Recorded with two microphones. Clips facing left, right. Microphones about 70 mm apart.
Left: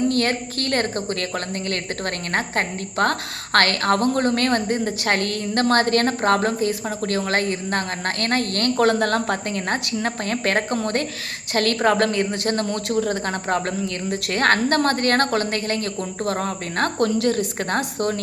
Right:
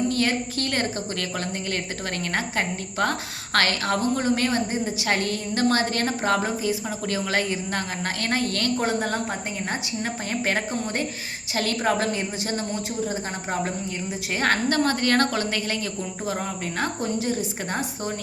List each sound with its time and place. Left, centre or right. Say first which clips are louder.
0.1 s a woman's voice: left 2 dB; left
2.3 s a woman's voice: left 3 dB; left
8.8 s a woman's voice: left 6 dB; left